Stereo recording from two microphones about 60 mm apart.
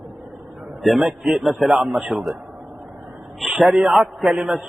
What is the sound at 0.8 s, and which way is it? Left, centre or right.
A man's voice, centre.